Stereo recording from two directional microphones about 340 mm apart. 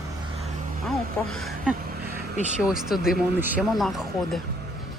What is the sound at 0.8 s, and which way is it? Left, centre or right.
Speech, centre.